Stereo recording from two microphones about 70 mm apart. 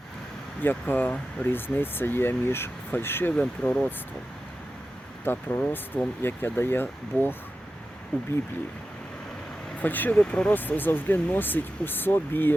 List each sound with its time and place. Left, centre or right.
0.6 s speech: left
3.3 s speech: centre
5.2 s speech: left
8.1 s speech: centre
9.8 s speech: left
10.2 s speech: centre
10.5 s speech: left